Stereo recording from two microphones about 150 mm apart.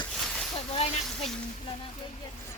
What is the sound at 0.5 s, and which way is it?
Speech, 40° left (ahead or behind).